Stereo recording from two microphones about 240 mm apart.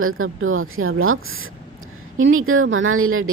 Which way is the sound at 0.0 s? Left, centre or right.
Right.